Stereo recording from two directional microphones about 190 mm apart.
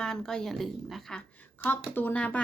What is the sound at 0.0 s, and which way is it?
Speech, 5° left (ahead or behind).